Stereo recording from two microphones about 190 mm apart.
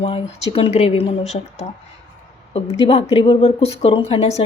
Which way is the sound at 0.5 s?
30° left (ahead or behind).